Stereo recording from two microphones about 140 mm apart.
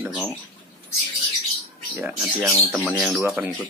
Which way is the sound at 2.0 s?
10° right (ahead or behind).